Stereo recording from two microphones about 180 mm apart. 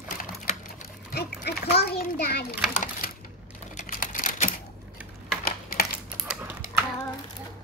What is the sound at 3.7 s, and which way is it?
Typing, 45° left (ahead or behind).